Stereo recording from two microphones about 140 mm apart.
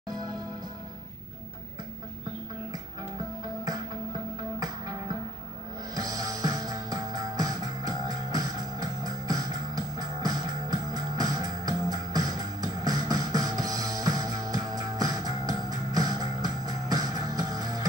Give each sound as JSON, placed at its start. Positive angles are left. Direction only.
{"t": 5.9, "sound": "music", "side_deg": -25}